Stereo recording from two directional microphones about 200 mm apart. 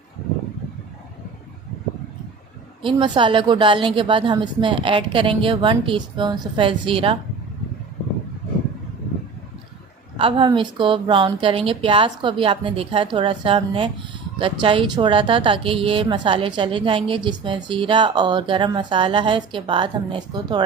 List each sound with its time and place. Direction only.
2.8 s speech: 25° right (ahead or behind)
10.2 s speech: 25° right (ahead or behind)